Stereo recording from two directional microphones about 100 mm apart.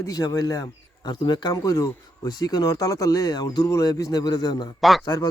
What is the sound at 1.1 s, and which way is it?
Speech, 50° left (ahead or behind).